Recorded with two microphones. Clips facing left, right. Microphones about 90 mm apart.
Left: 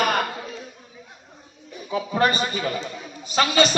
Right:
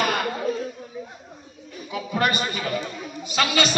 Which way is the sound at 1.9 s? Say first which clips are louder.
Left 3 dB; 30° left (ahead or behind).